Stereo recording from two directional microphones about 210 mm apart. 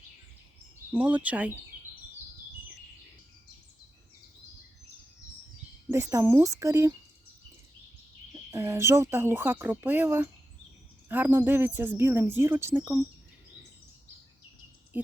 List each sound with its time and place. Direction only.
0.9 s speech: 5° right (ahead or behind)
5.9 s speech: 15° right (ahead or behind)
8.4 s speech: 10° right (ahead or behind)